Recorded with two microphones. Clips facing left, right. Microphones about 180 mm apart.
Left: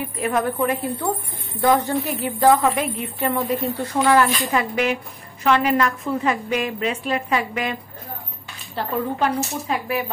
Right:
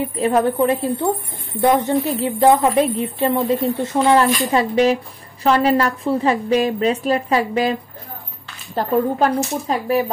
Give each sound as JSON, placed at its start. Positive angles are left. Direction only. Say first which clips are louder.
{"t": 0.0, "sound": "a woman's voice", "louder": "right 5 dB", "side_deg": -30}
{"t": 8.7, "sound": "a woman's voice", "louder": "right 6 dB", "side_deg": -40}